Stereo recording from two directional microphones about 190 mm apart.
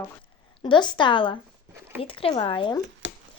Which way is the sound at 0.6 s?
25° left (ahead or behind).